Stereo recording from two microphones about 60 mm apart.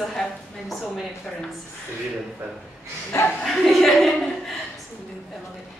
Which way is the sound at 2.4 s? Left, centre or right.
Right.